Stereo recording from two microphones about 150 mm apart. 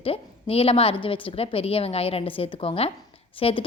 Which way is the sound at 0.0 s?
40° left (ahead or behind).